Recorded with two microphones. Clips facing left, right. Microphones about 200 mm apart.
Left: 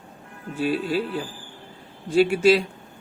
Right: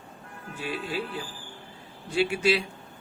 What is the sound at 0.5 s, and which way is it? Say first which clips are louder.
Speech: left 9 dB; 40° left (ahead or behind).